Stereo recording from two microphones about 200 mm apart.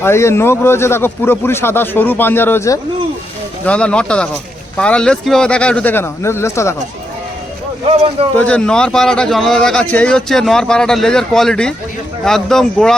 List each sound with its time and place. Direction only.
0.0 s a man's voice: 15° left (ahead or behind)
7.9 s speech: 30° right (ahead or behind)
8.4 s a man's voice: 5° left (ahead or behind)